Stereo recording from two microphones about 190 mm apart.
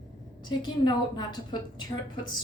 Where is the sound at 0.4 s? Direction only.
25° left (ahead or behind).